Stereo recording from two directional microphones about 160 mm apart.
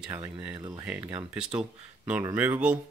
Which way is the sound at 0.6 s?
25° right (ahead or behind).